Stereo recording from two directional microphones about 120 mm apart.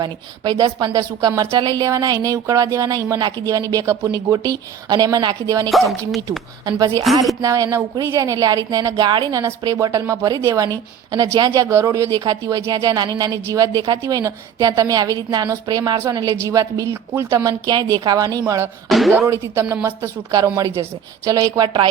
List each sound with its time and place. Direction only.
0.0 s a woman's voice: 35° right (ahead or behind)
18.9 s speech: centre (ahead or behind)
19.1 s a woman's voice: 20° right (ahead or behind)
21.2 s a woman's voice: 30° right (ahead or behind)